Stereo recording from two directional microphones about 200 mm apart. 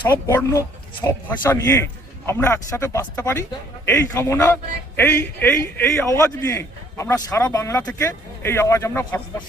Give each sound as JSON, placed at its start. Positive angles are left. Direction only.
{"t": 0.3, "sound": "a man's voice", "side_deg": 10}